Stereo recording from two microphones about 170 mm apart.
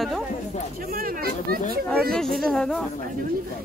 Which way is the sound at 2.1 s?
5° left (ahead or behind).